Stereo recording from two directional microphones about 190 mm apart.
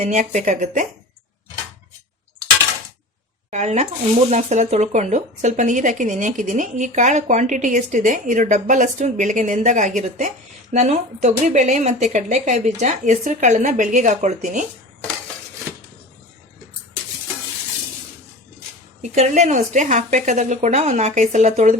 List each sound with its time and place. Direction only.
0.0 s speech: 40° right (ahead or behind)
3.5 s speech: 35° right (ahead or behind)
19.1 s speech: 40° right (ahead or behind)